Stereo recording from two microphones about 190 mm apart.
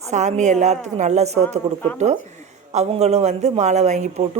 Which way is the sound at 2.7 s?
35° right (ahead or behind).